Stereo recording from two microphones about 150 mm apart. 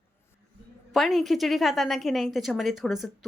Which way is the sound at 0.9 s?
Centre (ahead or behind).